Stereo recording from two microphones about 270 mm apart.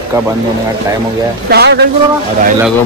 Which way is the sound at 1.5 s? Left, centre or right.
Right.